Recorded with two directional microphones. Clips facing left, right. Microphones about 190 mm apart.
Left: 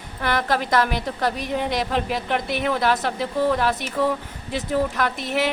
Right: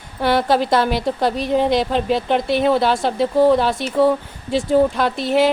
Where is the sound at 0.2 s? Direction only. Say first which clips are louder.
Right 6 dB; 30° right (ahead or behind).